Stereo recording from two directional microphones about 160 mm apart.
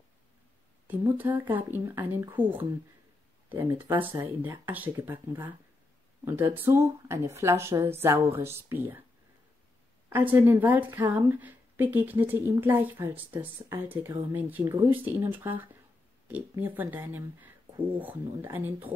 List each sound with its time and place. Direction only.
0.8 s a woman's voice: 10° right (ahead or behind)
10.0 s a woman's voice: 15° right (ahead or behind)